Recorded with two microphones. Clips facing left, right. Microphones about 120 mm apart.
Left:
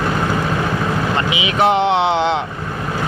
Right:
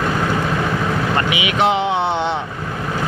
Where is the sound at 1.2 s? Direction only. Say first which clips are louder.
Even; 25° left (ahead or behind).